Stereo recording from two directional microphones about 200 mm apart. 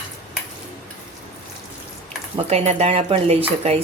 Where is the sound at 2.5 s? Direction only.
30° right (ahead or behind).